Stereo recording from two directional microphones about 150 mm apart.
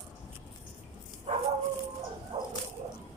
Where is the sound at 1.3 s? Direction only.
40° right (ahead or behind).